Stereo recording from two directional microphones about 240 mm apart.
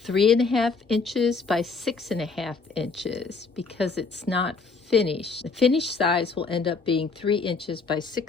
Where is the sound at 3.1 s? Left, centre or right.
Left.